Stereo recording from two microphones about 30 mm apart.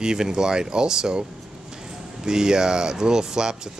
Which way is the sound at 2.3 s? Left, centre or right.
Right.